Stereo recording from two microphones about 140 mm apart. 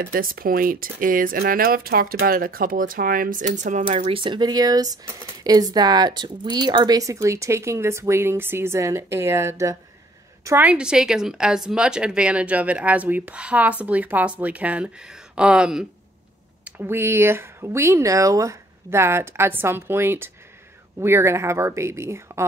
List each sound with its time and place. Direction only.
0.0 s speech: 90° right; by 4.0 s 60° right (ahead or behind)
4.0 s speech: 35° right (ahead or behind); by 15.9 s 5° right (ahead or behind)
16.6 s speech: 15° right (ahead or behind)